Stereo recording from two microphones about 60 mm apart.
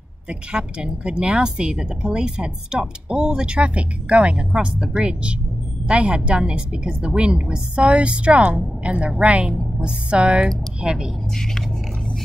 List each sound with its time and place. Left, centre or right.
0.3 s a woman's voice: centre